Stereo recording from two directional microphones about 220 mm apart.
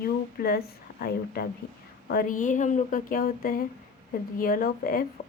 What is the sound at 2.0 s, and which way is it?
Speech, 40° left (ahead or behind).